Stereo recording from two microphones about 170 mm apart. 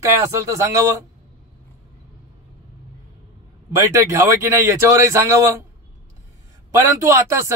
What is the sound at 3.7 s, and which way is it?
Speech, 15° right (ahead or behind).